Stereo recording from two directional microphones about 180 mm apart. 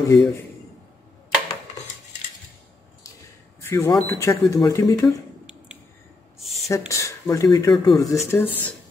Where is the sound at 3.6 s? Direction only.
15° left (ahead or behind).